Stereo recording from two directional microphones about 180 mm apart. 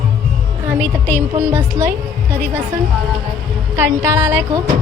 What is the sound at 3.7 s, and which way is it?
Speech, 10° right (ahead or behind).